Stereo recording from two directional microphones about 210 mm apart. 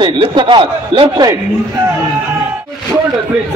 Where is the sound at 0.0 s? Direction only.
20° right (ahead or behind).